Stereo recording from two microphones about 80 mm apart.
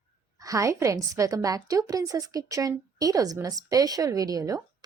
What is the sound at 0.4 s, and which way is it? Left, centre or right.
Speech, right.